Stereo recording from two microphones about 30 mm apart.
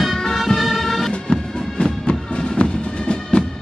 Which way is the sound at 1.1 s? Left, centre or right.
Left.